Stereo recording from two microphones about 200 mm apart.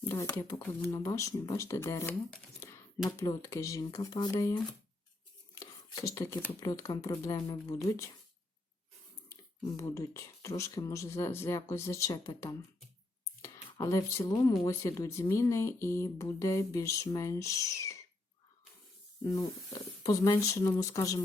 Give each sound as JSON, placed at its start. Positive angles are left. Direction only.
{"t": 0.1, "sound": "speech", "side_deg": 10}
{"t": 2.3, "sound": "a sound", "side_deg": 10}
{"t": 3.2, "sound": "speech", "side_deg": 15}
{"t": 5.5, "sound": "a sound", "side_deg": 15}
{"t": 6.5, "sound": "speech", "side_deg": 20}
{"t": 9.6, "sound": "speech", "side_deg": 15}
{"t": 13.7, "sound": "speech", "side_deg": 15}
{"t": 19.2, "sound": "speech", "side_deg": 15}